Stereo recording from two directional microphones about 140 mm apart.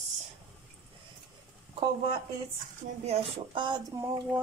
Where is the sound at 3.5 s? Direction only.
35° right (ahead or behind).